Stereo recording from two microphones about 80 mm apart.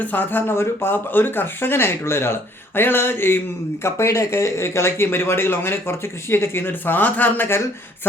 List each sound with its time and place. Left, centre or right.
0.0 s speech: left